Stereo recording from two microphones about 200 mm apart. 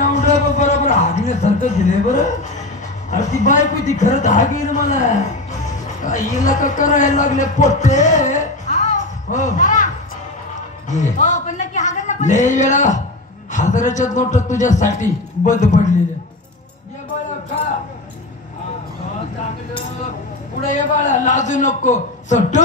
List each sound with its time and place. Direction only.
0.1 s music: 35° left (ahead or behind)
1.4 s a sound: 40° left (ahead or behind)
3.1 s a man's voice: 40° left (ahead or behind)
10.9 s a man's voice: 40° left (ahead or behind)
20.6 s a man's voice: 40° left (ahead or behind)